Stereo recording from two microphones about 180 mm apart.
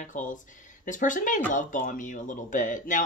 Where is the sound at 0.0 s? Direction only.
45° left (ahead or behind).